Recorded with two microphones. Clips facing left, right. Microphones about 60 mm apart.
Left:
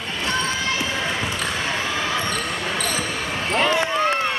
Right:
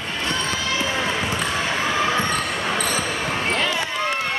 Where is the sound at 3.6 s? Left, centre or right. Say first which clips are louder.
Left 4 dB; left.